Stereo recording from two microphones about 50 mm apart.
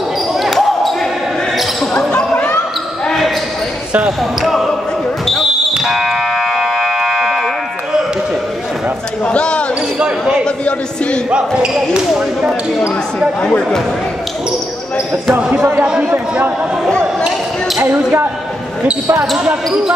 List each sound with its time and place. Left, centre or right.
0.4 s basketball bounce: centre
4.4 s basketball bounce: centre
5.8 s fire alarm: centre
9.2 s a sound: left
9.9 s basketball bounce: centre
10.4 s a sound: left
11.2 s speech: centre
12.1 s speech: centre
13.5 s speech: centre
15.5 s speech: right
15.8 s speech: right
17.8 s speech: right
19.1 s speech: right